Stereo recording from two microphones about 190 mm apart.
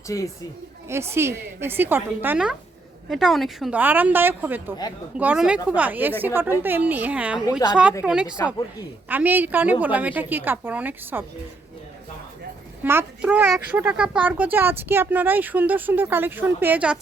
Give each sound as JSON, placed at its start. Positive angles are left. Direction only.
{"t": 0.1, "sound": "a woman's voice", "side_deg": 15}
{"t": 0.9, "sound": "a child's voice", "side_deg": -15}
{"t": 12.8, "sound": "a child's voice", "side_deg": -10}